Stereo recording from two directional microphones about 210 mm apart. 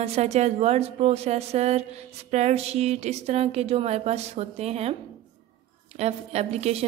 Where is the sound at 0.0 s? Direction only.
30° right (ahead or behind).